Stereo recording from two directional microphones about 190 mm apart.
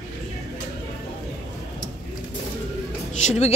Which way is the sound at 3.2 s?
35° left (ahead or behind).